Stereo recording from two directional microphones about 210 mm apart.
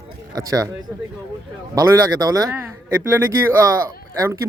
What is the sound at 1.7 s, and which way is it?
Speech, 15° right (ahead or behind).